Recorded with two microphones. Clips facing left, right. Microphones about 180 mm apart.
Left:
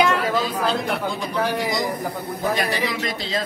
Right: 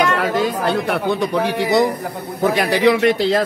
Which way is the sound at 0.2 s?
80° right.